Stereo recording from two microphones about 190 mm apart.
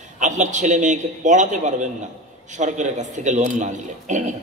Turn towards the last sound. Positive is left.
turn(degrees=-40)  # may be behind; listen again after turning